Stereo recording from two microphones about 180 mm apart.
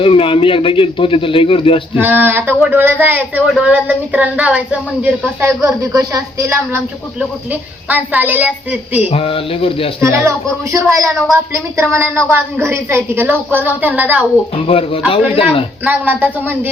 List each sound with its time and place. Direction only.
0.0 s a man's voice: 30° left (ahead or behind)
2.0 s a woman's voice: 10° right (ahead or behind)
9.0 s speech: 30° left (ahead or behind)
10.0 s a woman's voice: 15° right (ahead or behind)
14.7 s speech: 30° left (ahead or behind)
15.8 s a woman's voice: 10° right (ahead or behind)